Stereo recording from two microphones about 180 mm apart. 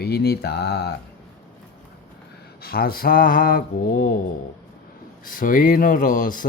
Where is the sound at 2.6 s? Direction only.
60° left (ahead or behind).